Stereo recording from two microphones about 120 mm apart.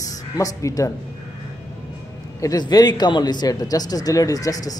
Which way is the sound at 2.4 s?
30° left (ahead or behind).